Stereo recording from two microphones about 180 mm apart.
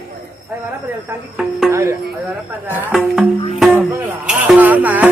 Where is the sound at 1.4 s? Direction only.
Centre (ahead or behind).